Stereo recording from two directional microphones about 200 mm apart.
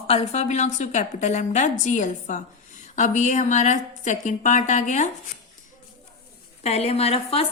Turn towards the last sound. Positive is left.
turn(degrees=30)  # may be behind; listen again after turning